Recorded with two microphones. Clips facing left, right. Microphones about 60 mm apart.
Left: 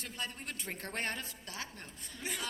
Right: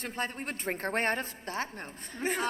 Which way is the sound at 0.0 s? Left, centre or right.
Right.